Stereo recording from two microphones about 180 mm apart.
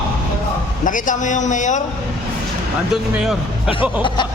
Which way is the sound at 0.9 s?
45° left (ahead or behind).